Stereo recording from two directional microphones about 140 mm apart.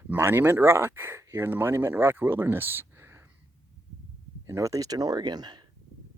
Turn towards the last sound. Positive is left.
turn(degrees=-30)  # may be behind; listen again after turning